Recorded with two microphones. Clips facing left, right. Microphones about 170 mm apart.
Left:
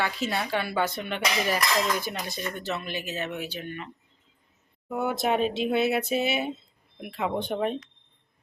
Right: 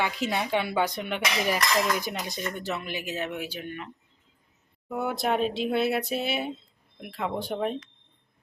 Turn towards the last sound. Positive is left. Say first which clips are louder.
# left 2 dB
turn(degrees=0)  # may be behind; listen again after turning